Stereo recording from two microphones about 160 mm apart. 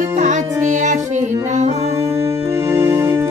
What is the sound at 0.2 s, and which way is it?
Music, 50° right (ahead or behind).